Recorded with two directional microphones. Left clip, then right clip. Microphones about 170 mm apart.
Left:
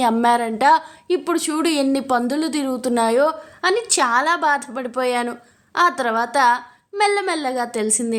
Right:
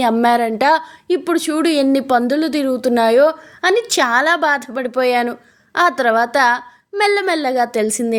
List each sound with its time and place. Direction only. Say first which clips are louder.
0.0 s a woman's voice: right 3 dB; 20° right (ahead or behind)